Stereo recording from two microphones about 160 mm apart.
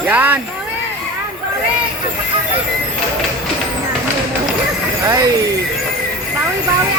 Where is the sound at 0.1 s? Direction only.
10° right (ahead or behind).